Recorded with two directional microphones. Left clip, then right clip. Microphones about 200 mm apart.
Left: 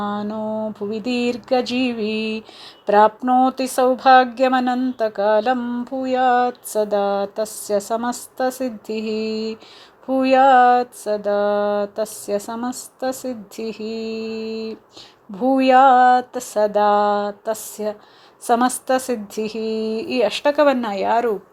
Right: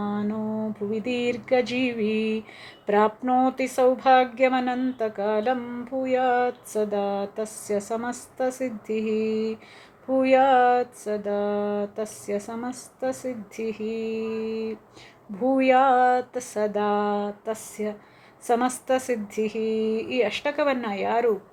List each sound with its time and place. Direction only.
0.0 s a woman's voice: 30° left (ahead or behind)